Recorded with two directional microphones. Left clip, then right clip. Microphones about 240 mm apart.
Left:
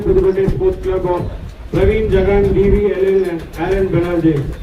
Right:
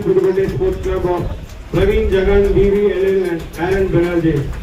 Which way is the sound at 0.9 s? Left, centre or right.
Left.